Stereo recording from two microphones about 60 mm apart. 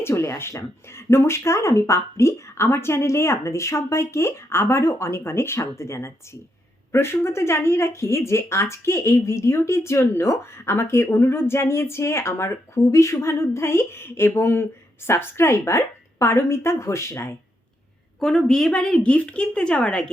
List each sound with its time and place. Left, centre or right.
0.0 s speech: left
18.2 s a woman's voice: centre